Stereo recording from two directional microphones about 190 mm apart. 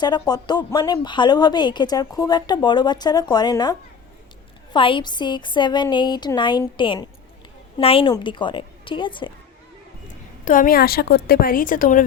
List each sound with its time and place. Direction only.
0.0 s speech: 20° left (ahead or behind)
10.4 s a woman's voice: 45° left (ahead or behind)